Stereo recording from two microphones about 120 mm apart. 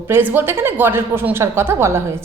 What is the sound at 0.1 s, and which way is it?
A woman's voice, 15° right (ahead or behind).